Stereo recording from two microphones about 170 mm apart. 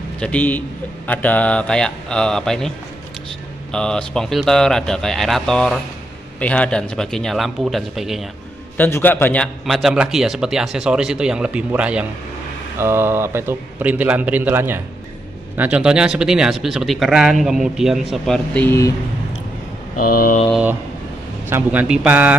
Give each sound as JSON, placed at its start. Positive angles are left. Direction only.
{"t": 0.2, "sound": "a man's voice", "side_deg": 10}
{"t": 3.7, "sound": "speech", "side_deg": 5}
{"t": 8.7, "sound": "a man's voice", "side_deg": 10}
{"t": 20.1, "sound": "mantra", "side_deg": 55}
{"t": 21.5, "sound": "a man's voice", "side_deg": -10}